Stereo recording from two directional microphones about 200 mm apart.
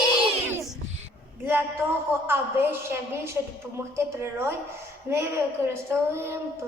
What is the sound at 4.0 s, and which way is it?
A woman's voice, 15° right (ahead or behind).